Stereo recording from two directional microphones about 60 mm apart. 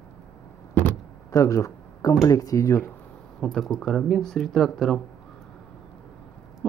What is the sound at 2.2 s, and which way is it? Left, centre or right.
Speech, left.